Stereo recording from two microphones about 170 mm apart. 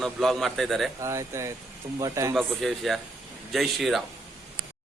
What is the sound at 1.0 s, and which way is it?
Speech, 15° right (ahead or behind).